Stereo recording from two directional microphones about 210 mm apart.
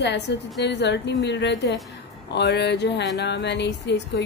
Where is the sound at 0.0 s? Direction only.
55° left (ahead or behind).